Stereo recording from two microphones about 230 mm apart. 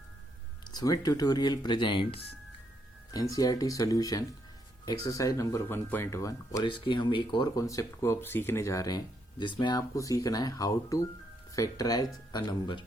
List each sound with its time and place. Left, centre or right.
0.7 s speech: centre